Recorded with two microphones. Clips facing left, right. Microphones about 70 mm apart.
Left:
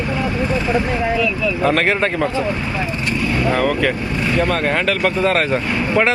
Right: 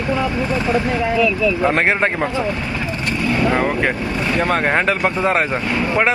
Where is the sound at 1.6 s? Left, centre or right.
Right.